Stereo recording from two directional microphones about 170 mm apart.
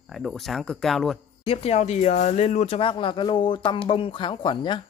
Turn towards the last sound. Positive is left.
turn(degrees=30)  # may be behind; listen again after turning